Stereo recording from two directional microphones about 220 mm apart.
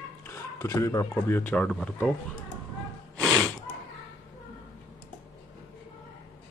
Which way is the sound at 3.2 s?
Centre (ahead or behind).